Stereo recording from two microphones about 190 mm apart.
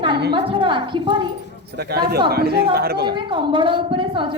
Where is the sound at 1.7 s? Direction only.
55° right (ahead or behind).